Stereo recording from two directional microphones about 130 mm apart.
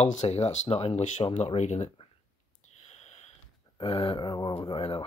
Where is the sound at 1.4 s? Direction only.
60° left (ahead or behind).